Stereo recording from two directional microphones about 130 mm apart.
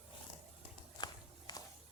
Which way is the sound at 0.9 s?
30° left (ahead or behind).